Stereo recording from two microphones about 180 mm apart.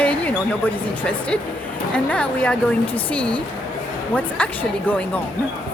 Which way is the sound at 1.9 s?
5° left (ahead or behind).